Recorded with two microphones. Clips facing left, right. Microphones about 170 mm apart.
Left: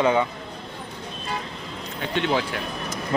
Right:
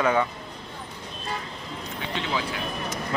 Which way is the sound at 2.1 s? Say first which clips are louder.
Left 7 dB; 60° left (ahead or behind).